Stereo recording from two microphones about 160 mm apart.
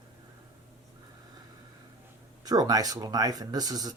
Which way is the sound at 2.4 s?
25° right (ahead or behind).